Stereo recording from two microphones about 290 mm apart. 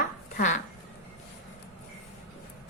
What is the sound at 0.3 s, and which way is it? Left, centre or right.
Speech, left.